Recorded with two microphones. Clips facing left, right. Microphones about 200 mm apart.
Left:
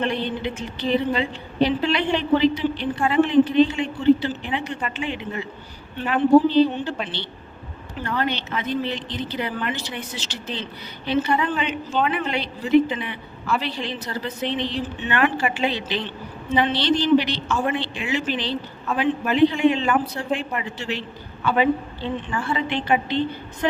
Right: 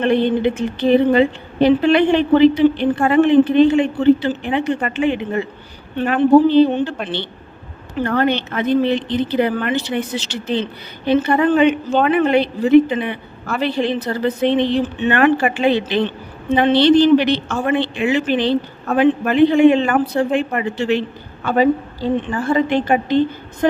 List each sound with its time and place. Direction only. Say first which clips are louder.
0.0 s speech: right 9 dB; 55° right (ahead or behind)
6.5 s a woman's voice: right 6 dB; 55° right (ahead or behind)
21.4 s a woman's voice: right 5 dB; 40° right (ahead or behind)